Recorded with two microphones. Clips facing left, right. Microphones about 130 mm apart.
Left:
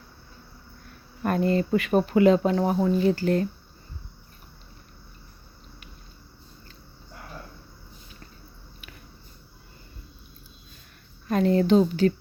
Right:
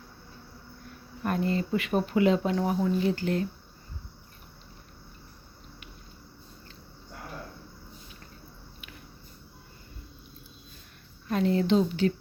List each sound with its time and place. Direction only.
1.2 s speech: 60° left (ahead or behind); by 3.4 s 40° left (ahead or behind)
11.3 s speech: 50° left (ahead or behind)